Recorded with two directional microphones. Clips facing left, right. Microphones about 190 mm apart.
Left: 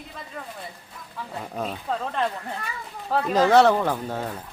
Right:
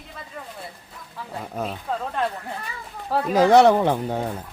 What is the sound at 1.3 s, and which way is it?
Speech, 5° right (ahead or behind).